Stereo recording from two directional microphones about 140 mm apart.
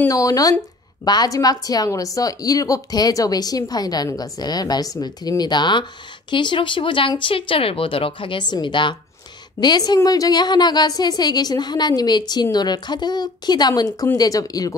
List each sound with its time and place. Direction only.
0.1 s a woman's voice: 25° left (ahead or behind)